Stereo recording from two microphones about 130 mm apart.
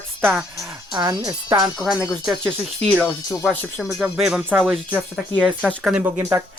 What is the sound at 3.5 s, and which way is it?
Speech, 10° left (ahead or behind).